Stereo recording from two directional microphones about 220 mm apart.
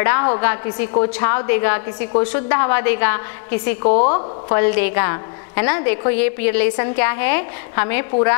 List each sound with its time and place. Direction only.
0.0 s a woman's voice: 20° left (ahead or behind)
3.8 s a woman's voice: 30° left (ahead or behind)
4.6 s a woman's voice: 15° left (ahead or behind)